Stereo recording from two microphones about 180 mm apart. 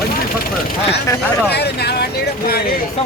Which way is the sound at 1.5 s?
65° left (ahead or behind).